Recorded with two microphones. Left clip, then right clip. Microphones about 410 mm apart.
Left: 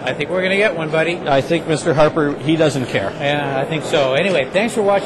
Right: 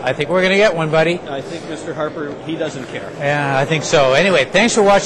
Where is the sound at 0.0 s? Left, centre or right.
Right.